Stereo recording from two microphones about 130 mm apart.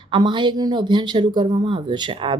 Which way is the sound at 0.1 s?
35° right (ahead or behind).